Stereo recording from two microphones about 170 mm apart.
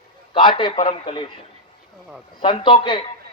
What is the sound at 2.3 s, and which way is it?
Speech, 30° left (ahead or behind).